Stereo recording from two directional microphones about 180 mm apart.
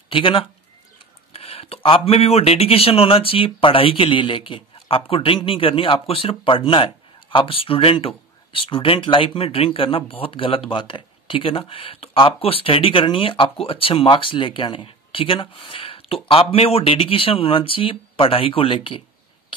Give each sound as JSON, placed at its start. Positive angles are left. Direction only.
{"t": 0.1, "sound": "speech", "side_deg": 30}